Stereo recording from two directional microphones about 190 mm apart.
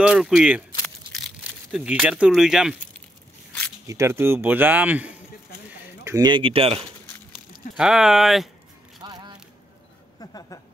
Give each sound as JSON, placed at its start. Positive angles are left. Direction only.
{"t": 0.0, "sound": "speech", "side_deg": -5}
{"t": 0.8, "sound": "crumpling", "side_deg": 0}
{"t": 3.8, "sound": "speech", "side_deg": -15}
{"t": 6.0, "sound": "speech", "side_deg": -20}
{"t": 7.7, "sound": "speech", "side_deg": 0}
{"t": 9.0, "sound": "single-lens reflex camera", "side_deg": -20}
{"t": 10.2, "sound": "a sound", "side_deg": 20}